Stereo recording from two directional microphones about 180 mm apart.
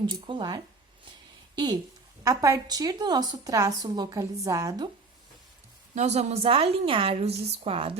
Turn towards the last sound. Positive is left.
turn(degrees=-30)  # may be behind; listen again after turning